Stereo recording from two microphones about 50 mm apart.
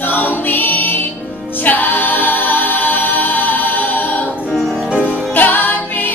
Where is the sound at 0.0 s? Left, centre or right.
Left.